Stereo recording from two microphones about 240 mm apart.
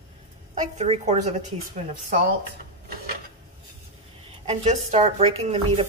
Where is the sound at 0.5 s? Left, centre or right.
Right.